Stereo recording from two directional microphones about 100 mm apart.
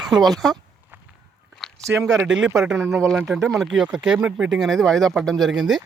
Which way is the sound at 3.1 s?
5° right (ahead or behind).